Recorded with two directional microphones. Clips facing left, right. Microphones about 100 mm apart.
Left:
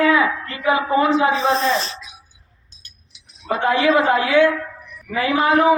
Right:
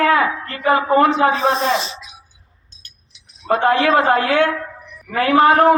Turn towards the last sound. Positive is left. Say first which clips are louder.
# right 4 dB
turn(degrees=-55)  # may be behind; listen again after turning